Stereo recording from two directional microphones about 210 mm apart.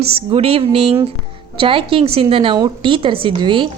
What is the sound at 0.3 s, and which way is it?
Speech, 30° right (ahead or behind).